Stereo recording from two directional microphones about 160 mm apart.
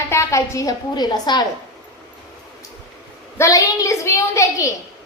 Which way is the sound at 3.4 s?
20° left (ahead or behind).